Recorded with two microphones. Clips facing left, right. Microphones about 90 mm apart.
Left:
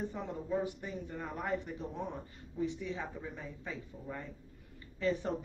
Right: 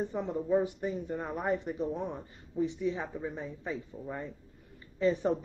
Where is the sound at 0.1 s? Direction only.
20° right (ahead or behind).